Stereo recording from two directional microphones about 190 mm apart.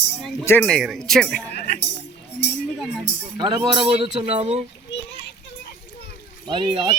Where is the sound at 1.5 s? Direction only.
60° left (ahead or behind).